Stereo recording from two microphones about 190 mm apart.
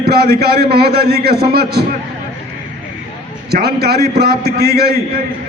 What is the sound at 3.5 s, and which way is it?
A man's voice, 55° right (ahead or behind).